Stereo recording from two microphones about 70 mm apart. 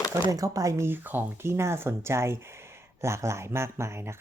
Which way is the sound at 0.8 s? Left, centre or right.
Right.